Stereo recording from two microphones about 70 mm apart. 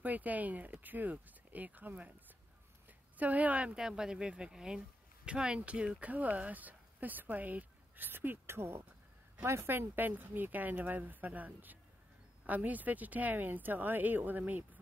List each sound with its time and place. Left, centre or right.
0.0 s speech: right